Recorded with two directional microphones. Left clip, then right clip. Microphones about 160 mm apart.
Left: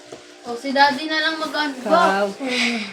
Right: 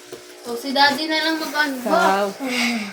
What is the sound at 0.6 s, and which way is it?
Speech, centre (ahead or behind).